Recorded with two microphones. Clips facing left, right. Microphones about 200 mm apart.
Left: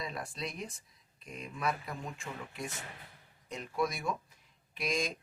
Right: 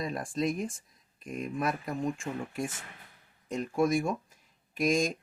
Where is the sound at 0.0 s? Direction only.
45° right (ahead or behind).